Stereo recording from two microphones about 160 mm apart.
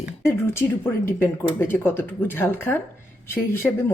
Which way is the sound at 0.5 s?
15° left (ahead or behind).